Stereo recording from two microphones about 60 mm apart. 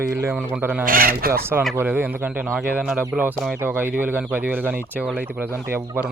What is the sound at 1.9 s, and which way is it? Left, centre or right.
Speech, right.